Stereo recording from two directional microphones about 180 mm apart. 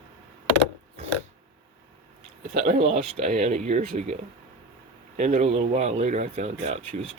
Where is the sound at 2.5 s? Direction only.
45° right (ahead or behind).